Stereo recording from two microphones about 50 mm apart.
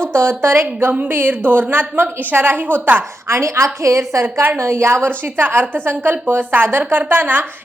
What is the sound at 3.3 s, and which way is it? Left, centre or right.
Speech, right.